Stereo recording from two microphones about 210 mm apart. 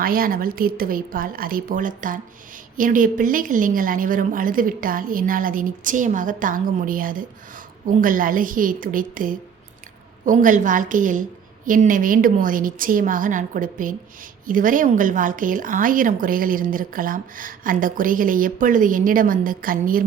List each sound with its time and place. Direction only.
0.0 s a woman's voice: 45° right (ahead or behind)